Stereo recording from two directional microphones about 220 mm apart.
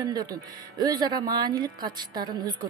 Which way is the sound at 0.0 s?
20° right (ahead or behind).